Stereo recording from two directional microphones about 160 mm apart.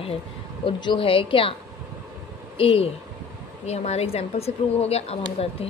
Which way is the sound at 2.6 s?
35° left (ahead or behind).